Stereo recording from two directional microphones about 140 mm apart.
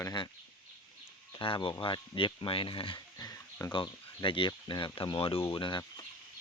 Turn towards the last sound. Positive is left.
turn(degrees=30)  # may be behind; listen again after turning